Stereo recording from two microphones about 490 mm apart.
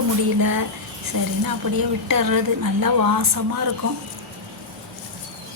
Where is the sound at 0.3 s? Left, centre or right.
Right.